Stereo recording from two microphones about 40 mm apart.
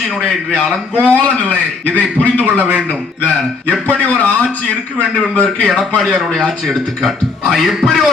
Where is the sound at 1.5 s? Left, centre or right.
Left.